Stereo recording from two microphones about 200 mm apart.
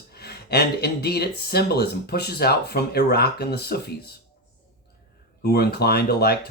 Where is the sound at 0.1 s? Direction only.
55° left (ahead or behind).